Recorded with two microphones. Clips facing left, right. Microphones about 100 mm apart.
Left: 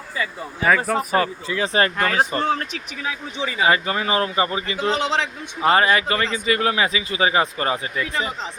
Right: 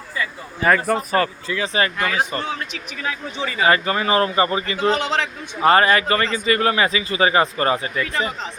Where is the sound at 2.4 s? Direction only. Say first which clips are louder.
Left 5 dB; 45° left (ahead or behind).